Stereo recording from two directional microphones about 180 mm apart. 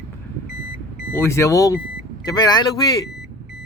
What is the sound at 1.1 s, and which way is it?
Speech, 15° left (ahead or behind).